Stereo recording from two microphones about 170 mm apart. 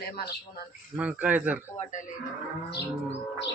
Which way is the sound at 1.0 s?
10° right (ahead or behind).